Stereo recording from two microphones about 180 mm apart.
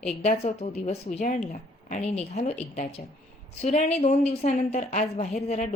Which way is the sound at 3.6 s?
40° left (ahead or behind).